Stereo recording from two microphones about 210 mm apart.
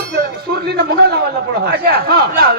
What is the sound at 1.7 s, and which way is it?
Speech, 45° right (ahead or behind).